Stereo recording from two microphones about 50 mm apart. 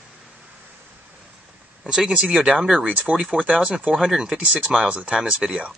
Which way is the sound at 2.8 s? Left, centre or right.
Right.